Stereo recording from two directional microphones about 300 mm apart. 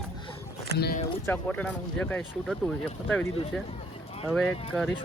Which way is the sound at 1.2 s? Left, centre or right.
Centre.